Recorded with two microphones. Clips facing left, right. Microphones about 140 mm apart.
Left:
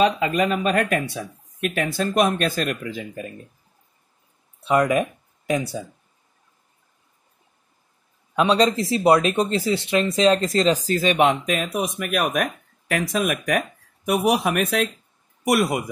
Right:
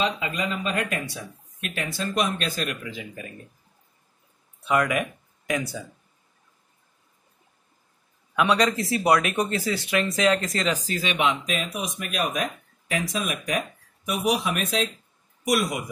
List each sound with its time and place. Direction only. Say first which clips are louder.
0.0 s speech: left 8 dB; 55° left (ahead or behind)
4.6 s speech: left 4 dB; 30° left (ahead or behind)
8.4 s speech: left 3 dB; 30° left (ahead or behind); by 15.8 s 60° left (ahead or behind)